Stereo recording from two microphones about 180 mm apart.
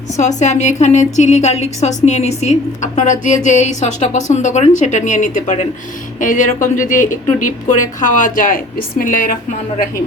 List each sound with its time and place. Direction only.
0.2 s a woman's voice: 40° left (ahead or behind)